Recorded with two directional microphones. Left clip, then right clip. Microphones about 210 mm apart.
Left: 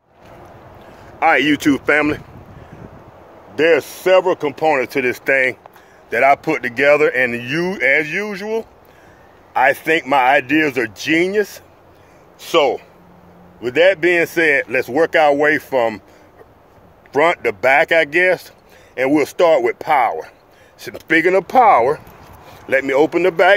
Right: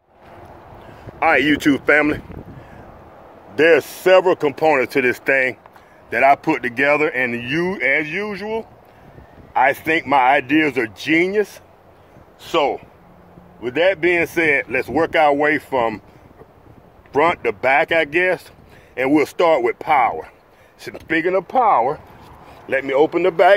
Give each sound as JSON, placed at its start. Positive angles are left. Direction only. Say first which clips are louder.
{"t": 1.2, "sound": "speech", "louder": "left 1 dB", "side_deg": 5}
{"t": 3.5, "sound": "speech", "louder": "even", "side_deg": -10}
{"t": 17.1, "sound": "speech", "louder": "left 2 dB", "side_deg": 10}
{"t": 21.1, "sound": "speech", "louder": "left 5 dB", "side_deg": 30}
{"t": 22.7, "sound": "speech", "louder": "left 2 dB", "side_deg": 20}